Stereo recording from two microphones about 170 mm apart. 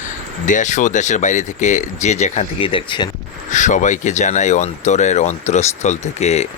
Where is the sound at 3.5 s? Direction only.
45° left (ahead or behind).